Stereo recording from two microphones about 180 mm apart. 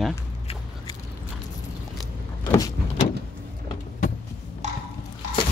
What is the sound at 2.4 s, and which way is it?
Vehicle, 20° left (ahead or behind).